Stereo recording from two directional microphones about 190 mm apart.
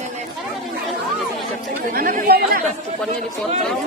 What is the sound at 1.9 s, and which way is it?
Speech, 50° right (ahead or behind).